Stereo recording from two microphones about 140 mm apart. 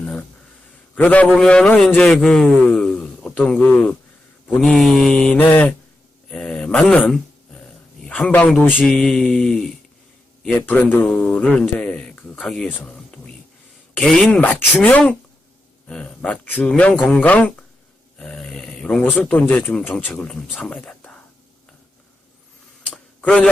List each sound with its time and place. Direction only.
0.0 s a sound: 10° left (ahead or behind)
0.9 s speech: 10° left (ahead or behind)
1.4 s mantra: 5° left (ahead or behind)
2.6 s speech: 5° left (ahead or behind)
4.4 s mantra: 5° left (ahead or behind)
6.3 s a sound: 5° left (ahead or behind)
8.0 s a man's voice: 10° left (ahead or behind)
8.8 s mantra: 5° left (ahead or behind)
10.4 s a man's voice: 5° left (ahead or behind)
22.9 s a sound: 5° left (ahead or behind)